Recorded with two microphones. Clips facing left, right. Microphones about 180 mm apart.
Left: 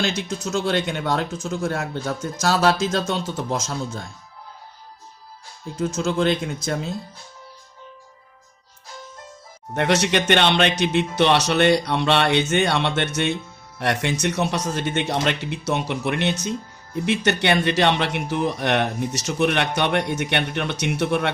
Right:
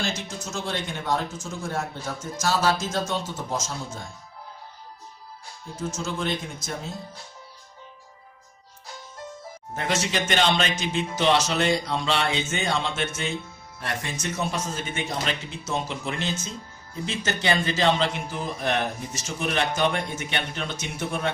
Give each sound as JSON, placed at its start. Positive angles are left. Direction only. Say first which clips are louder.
{"t": 0.0, "sound": "speech", "louder": "left 6 dB", "side_deg": 70}
{"t": 5.8, "sound": "speech", "louder": "left 8 dB", "side_deg": 65}
{"t": 9.7, "sound": "speech", "louder": "left 7 dB", "side_deg": 70}